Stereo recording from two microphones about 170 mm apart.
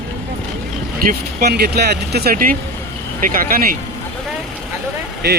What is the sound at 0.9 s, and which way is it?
Speech, 65° right (ahead or behind).